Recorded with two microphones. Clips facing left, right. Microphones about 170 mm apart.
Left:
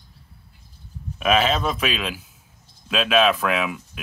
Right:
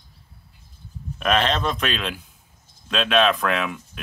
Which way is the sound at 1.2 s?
5° left (ahead or behind).